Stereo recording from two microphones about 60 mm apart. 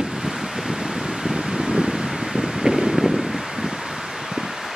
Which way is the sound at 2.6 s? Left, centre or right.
Centre.